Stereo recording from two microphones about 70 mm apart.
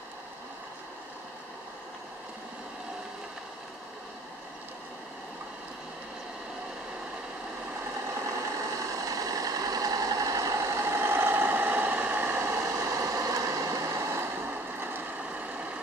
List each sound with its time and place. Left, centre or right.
8.7 s vehicle: right
12.6 s vehicle: right; by 15.8 s centre